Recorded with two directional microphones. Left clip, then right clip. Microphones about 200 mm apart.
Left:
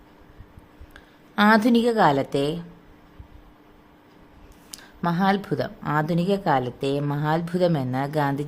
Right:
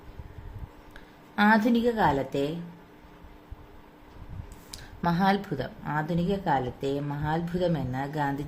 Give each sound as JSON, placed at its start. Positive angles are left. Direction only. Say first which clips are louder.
{"t": 0.9, "sound": "a woman's voice", "louder": "left 4 dB", "side_deg": 35}
{"t": 4.7, "sound": "a sound", "louder": "left 2 dB", "side_deg": 25}
{"t": 5.5, "sound": "speech", "louder": "left 7 dB", "side_deg": 35}